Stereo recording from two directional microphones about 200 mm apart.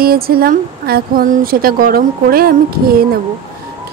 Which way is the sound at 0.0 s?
50° right (ahead or behind).